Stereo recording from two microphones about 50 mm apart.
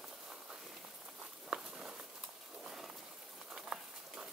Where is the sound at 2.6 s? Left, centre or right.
Centre.